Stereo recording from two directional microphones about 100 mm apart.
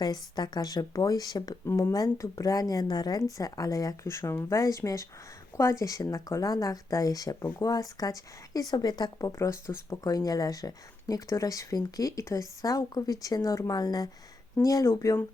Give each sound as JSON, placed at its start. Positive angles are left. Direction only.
{"t": 0.0, "sound": "speech", "side_deg": 45}
{"t": 1.6, "sound": "speech", "side_deg": 30}
{"t": 9.4, "sound": "speech", "side_deg": 30}